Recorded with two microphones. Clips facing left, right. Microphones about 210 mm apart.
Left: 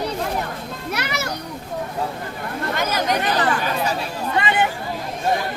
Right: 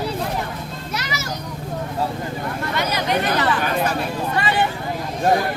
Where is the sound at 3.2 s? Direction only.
55° right (ahead or behind).